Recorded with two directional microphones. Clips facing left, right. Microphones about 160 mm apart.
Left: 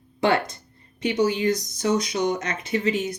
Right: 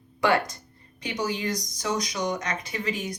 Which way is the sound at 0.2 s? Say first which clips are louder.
Left 2 dB; 25° left (ahead or behind).